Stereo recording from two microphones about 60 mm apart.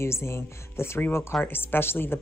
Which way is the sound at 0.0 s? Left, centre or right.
Left.